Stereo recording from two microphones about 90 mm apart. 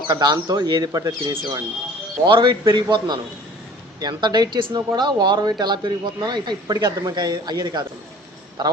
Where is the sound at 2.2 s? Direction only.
60° right (ahead or behind).